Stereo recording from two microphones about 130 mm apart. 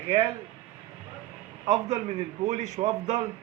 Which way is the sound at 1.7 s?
55° right (ahead or behind).